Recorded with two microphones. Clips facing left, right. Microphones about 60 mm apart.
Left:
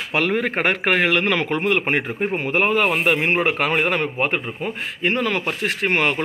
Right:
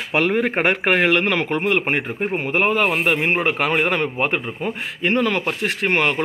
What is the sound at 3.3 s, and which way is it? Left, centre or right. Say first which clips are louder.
Speech: even; centre.